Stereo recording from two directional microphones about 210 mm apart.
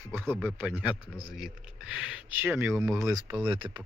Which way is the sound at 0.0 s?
10° right (ahead or behind).